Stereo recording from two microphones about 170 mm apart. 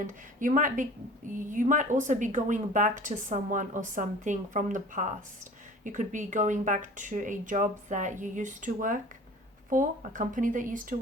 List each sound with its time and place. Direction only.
0.3 s speech: 50° right (ahead or behind)